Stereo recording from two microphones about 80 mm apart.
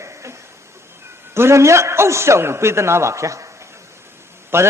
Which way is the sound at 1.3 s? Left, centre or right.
Right.